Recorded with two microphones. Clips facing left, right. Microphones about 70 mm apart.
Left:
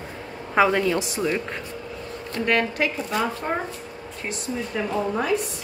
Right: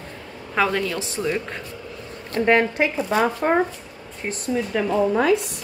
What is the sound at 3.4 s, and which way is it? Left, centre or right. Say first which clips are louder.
Speech: right 7 dB; right.